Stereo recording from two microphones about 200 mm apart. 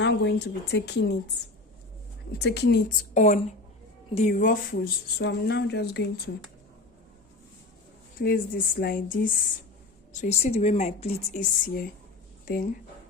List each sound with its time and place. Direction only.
0.0 s speech: 60° left (ahead or behind)
2.3 s speech: 55° left (ahead or behind)
3.2 s a woman's voice: 35° left (ahead or behind)
5.2 s speech: 60° left (ahead or behind)
8.2 s a woman's voice: 50° left (ahead or behind)